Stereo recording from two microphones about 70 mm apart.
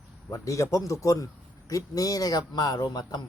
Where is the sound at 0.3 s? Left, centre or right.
Left.